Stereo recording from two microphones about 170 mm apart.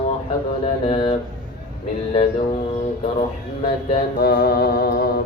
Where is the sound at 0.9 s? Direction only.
30° left (ahead or behind).